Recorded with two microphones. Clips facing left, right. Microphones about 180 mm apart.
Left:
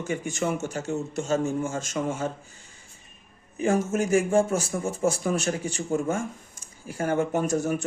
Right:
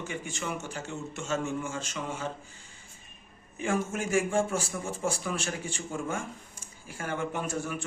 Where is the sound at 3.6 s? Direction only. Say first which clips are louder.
Left 6 dB; 40° left (ahead or behind).